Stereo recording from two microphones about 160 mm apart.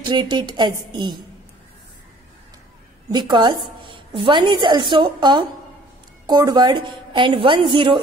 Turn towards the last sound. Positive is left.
turn(degrees=-30)  # may be behind; listen again after turning